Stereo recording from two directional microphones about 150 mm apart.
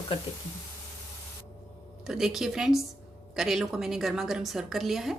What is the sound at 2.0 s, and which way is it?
A woman's voice, 5° right (ahead or behind).